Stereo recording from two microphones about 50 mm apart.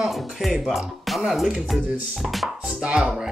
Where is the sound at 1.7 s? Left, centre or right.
Centre.